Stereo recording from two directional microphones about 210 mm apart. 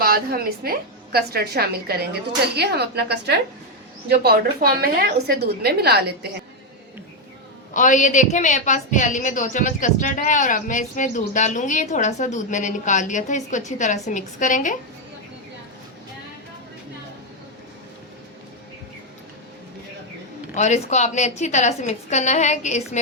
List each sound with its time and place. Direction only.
0.0 s a woman's voice: 45° right (ahead or behind)
7.7 s a woman's voice: 35° left (ahead or behind)
20.6 s a woman's voice: 35° left (ahead or behind)